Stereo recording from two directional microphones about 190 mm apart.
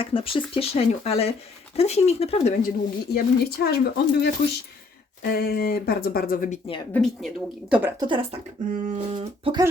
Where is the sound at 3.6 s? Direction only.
55° left (ahead or behind).